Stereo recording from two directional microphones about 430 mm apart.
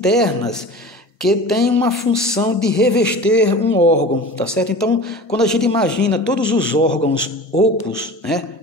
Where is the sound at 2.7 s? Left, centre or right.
Left.